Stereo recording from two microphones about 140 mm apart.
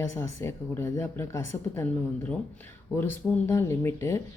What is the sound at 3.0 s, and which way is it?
Speech, 15° left (ahead or behind).